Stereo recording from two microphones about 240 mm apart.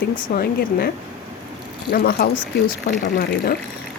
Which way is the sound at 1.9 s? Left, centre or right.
Left.